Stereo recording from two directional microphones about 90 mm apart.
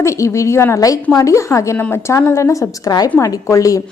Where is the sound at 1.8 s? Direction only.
25° left (ahead or behind).